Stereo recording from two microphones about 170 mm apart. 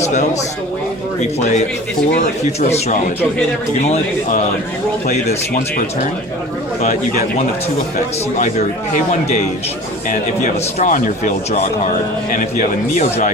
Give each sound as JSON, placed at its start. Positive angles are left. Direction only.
{"t": 2.1, "sound": "speech", "side_deg": 40}
{"t": 10.1, "sound": "speech", "side_deg": 45}